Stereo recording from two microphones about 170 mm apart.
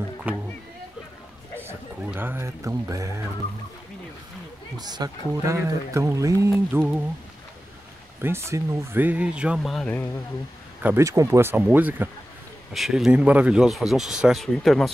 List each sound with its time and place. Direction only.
0.3 s speech: 10° right (ahead or behind)
1.6 s speech: 15° right (ahead or behind)
4.7 s speech: 25° right (ahead or behind)
8.2 s speech: 15° right (ahead or behind); by 10.0 s 5° left (ahead or behind)
10.8 s speech: 15° right (ahead or behind)